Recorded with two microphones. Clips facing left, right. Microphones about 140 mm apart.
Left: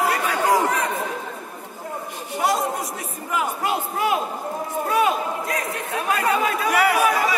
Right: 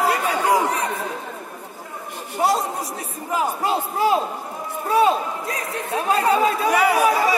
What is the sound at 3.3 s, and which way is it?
A man's voice, 30° right (ahead or behind).